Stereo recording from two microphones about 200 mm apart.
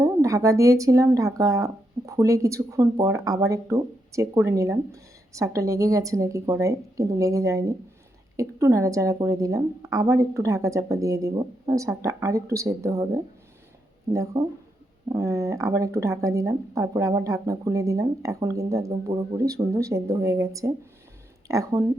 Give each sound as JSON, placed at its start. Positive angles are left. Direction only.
{"t": 0.0, "sound": "speech", "side_deg": -15}
{"t": 14.1, "sound": "speech", "side_deg": -15}